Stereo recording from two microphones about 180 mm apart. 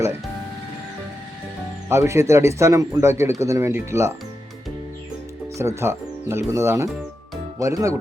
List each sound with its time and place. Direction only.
1.9 s speech: 15° right (ahead or behind)
5.5 s speech: 15° right (ahead or behind)